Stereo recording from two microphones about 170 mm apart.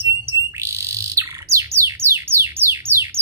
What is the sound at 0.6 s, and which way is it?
Bird, 15° right (ahead or behind).